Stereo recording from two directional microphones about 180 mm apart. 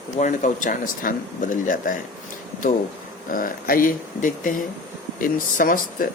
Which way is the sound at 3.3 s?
50° left (ahead or behind).